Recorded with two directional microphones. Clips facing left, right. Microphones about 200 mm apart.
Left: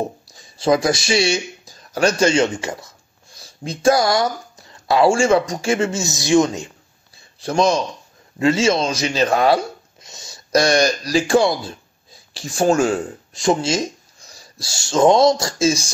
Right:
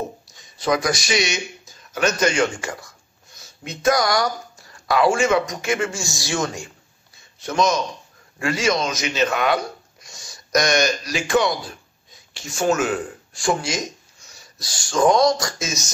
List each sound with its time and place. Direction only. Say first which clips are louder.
0.3 s speech: left 5 dB; 30° left (ahead or behind)
7.3 s a man's voice: left 3 dB; 30° left (ahead or behind)